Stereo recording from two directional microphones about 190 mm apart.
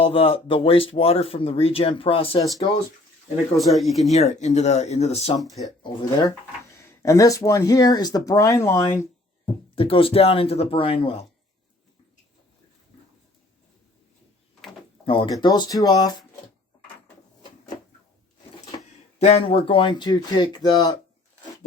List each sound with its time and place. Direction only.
0.0 s speech: 30° left (ahead or behind)
3.6 s speech: centre (ahead or behind)
4.1 s speech: 35° left (ahead or behind)
5.8 s speech: 25° left (ahead or behind)
9.7 s speech: 30° left (ahead or behind)
15.0 s speech: 30° left (ahead or behind)
19.2 s speech: 30° left (ahead or behind)